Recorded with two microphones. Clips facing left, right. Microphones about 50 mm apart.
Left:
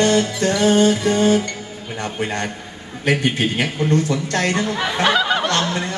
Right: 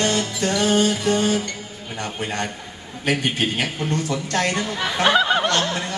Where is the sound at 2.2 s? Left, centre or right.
Left.